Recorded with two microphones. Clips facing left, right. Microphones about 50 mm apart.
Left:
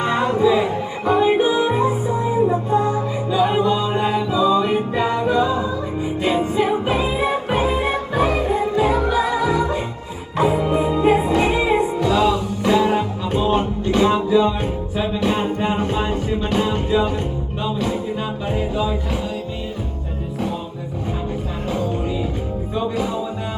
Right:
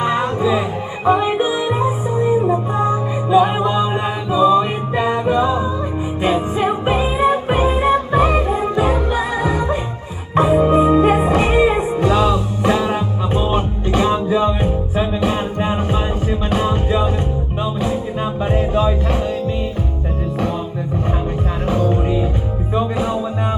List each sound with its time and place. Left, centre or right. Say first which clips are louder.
0.0 s music: even; centre
1.0 s music: even; centre
18.5 s music: right 5 dB; right